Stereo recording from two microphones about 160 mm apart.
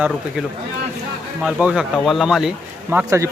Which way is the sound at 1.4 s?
5° right (ahead or behind).